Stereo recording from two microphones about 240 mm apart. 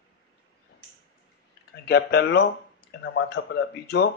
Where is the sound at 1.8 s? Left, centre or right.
Left.